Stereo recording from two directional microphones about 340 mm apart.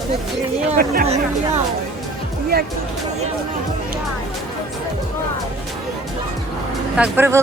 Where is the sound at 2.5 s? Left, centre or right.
Right.